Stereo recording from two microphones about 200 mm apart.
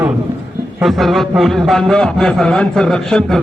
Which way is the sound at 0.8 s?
Centre (ahead or behind).